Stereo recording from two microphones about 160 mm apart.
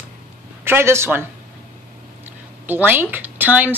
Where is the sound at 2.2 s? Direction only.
10° right (ahead or behind).